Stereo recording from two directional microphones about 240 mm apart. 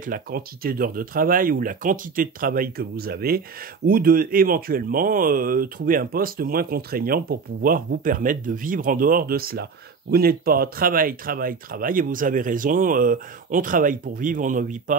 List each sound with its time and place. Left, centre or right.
0.0 s speech: right